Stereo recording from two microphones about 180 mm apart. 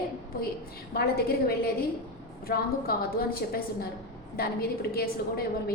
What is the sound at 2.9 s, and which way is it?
Speech, 55° left (ahead or behind).